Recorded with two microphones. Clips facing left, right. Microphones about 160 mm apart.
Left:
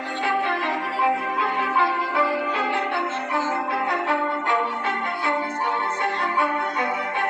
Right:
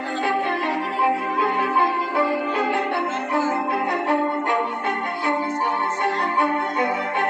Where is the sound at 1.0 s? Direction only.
45° right (ahead or behind).